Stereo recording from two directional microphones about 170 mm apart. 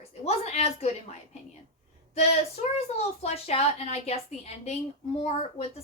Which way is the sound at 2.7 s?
40° left (ahead or behind).